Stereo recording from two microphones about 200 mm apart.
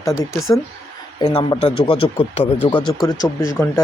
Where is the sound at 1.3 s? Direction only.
25° left (ahead or behind).